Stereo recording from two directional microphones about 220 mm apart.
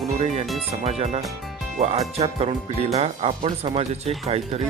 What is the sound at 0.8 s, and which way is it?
Speech, 30° right (ahead or behind).